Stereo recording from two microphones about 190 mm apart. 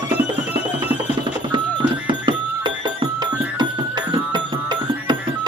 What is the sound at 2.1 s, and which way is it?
Music, 25° right (ahead or behind).